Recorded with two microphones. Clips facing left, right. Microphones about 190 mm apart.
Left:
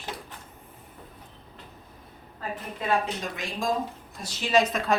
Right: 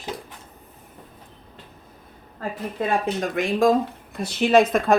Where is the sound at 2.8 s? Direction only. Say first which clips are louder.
Right 4 dB; 50° right (ahead or behind).